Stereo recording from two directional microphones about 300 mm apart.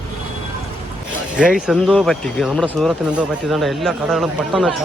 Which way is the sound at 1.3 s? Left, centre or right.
Centre.